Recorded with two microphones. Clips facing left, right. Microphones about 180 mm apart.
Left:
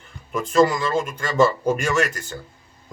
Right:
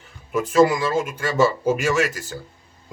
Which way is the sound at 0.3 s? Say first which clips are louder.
Right 1 dB; 5° right (ahead or behind).